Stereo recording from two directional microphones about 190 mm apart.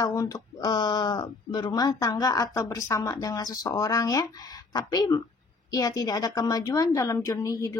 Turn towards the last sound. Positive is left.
turn(degrees=15)  # may be behind; listen again after turning